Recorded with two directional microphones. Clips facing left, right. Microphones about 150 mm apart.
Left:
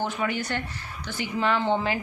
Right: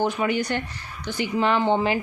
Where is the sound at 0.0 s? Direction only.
15° right (ahead or behind).